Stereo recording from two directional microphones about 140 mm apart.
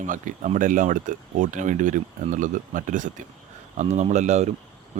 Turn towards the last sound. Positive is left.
turn(degrees=-55)  # may be behind; listen again after turning